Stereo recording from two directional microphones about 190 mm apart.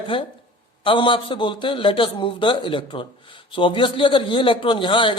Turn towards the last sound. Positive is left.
turn(degrees=25)  # may be behind; listen again after turning